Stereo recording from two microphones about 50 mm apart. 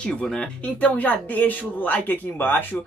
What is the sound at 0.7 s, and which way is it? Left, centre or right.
Speech, left.